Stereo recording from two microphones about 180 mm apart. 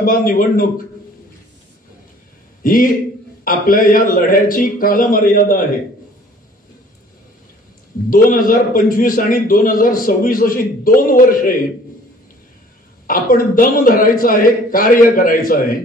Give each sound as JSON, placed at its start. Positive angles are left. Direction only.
{"t": 0.0, "sound": "a man's voice", "side_deg": 50}
{"t": 2.6, "sound": "a man's voice", "side_deg": 50}
{"t": 8.1, "sound": "a man's voice", "side_deg": 50}
{"t": 13.0, "sound": "a man's voice", "side_deg": 50}